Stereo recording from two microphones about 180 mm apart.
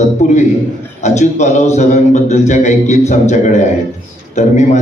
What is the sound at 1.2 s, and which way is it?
A man's voice, 40° left (ahead or behind).